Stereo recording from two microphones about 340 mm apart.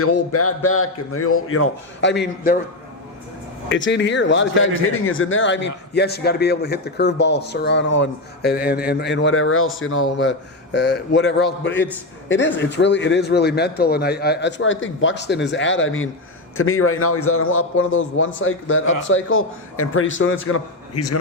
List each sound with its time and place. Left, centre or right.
0.0 s a man's voice: left
3.7 s a man's voice: left